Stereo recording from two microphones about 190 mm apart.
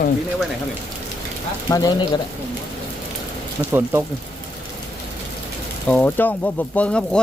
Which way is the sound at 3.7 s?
15° right (ahead or behind).